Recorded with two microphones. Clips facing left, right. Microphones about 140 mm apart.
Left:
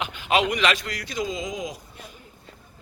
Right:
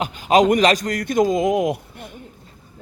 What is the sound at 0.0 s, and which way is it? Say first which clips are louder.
A man's voice: right 7 dB; 40° right (ahead or behind).